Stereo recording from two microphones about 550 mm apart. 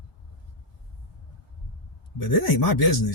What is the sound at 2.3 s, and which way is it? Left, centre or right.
Speech, left.